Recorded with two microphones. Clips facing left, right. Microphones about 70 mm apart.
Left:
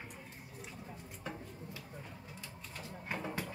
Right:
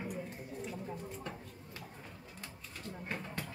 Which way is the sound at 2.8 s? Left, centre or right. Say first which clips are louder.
Left 1 dB; centre.